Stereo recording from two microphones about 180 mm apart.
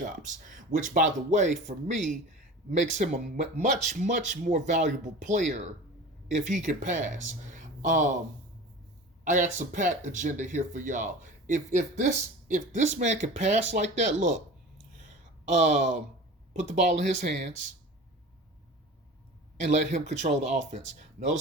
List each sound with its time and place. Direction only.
0.0 s speech: 45° right (ahead or behind)
9.2 s speech: 45° right (ahead or behind)
15.5 s speech: 40° right (ahead or behind)
19.5 s speech: 40° right (ahead or behind)